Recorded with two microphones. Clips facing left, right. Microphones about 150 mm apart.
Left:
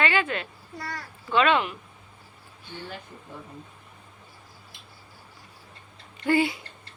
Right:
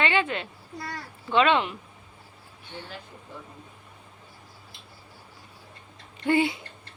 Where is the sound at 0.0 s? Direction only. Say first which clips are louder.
Even; 25° right (ahead or behind).